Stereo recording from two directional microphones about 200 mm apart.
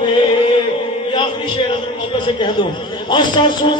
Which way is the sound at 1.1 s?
25° left (ahead or behind).